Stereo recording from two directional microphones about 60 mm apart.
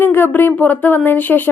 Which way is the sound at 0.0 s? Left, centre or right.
Left.